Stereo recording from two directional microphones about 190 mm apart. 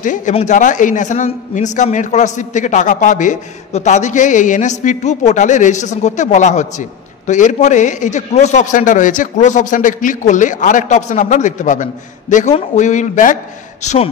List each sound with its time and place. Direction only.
0.0 s a man's voice: 40° left (ahead or behind)
13.8 s a man's voice: 30° left (ahead or behind)